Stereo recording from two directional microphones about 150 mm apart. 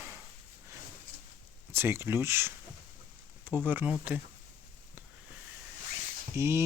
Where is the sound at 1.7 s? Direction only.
15° right (ahead or behind).